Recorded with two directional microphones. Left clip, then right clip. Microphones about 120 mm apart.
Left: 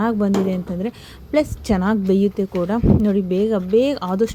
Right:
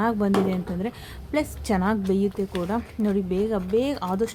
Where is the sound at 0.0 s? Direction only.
25° left (ahead or behind).